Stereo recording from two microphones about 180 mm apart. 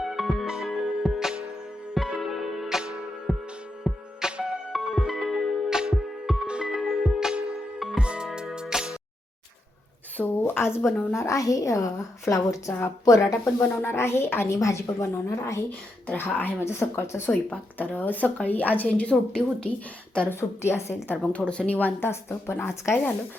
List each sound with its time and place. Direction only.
0.0 s music: centre (ahead or behind)
3.9 s music: 10° left (ahead or behind)
4.2 s music: 5° right (ahead or behind)
10.2 s a woman's voice: 10° left (ahead or behind)